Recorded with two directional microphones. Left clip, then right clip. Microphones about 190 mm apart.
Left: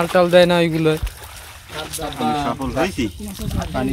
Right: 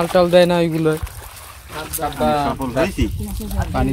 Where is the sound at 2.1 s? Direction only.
40° right (ahead or behind).